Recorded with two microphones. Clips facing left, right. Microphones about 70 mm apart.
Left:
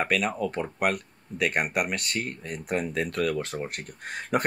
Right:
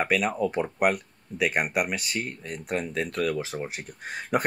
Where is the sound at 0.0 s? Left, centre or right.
Centre.